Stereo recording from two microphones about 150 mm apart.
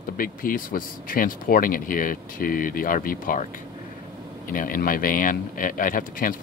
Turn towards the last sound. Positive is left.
turn(degrees=65)  # may be behind; listen again after turning